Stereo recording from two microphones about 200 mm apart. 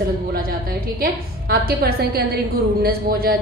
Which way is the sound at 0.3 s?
45° right (ahead or behind).